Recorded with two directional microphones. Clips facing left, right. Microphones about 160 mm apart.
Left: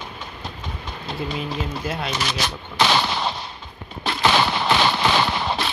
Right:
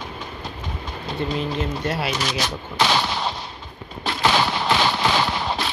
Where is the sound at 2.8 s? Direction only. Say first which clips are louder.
Left 1 dB; 70° left (ahead or behind).